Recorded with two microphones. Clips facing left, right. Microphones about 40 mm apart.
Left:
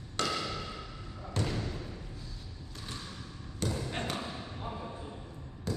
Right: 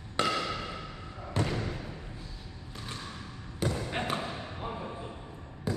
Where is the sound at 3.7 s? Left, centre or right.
Centre.